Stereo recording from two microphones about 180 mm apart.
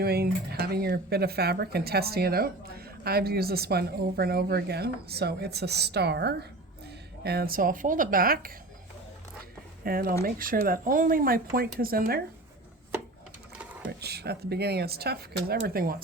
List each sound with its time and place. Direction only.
0.0 s speech: 60° right (ahead or behind)
9.4 s a sound: 55° right (ahead or behind)
10.2 s speech: 55° right (ahead or behind)
14.0 s speech: 65° right (ahead or behind)